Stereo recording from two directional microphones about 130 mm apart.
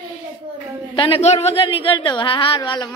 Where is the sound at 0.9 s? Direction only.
45° left (ahead or behind).